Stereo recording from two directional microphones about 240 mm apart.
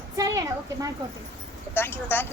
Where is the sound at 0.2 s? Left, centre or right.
Centre.